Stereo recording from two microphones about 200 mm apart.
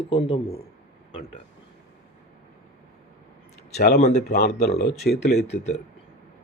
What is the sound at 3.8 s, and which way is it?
Speech, 55° left (ahead or behind).